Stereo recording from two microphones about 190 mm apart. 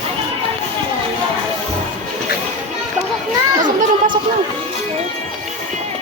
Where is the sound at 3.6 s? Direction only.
45° right (ahead or behind).